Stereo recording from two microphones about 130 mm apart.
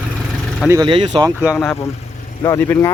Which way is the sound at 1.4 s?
15° left (ahead or behind).